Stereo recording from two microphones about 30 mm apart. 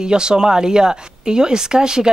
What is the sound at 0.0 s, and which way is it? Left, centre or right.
Speech, right.